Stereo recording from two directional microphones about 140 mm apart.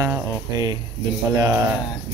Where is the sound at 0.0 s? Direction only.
25° right (ahead or behind).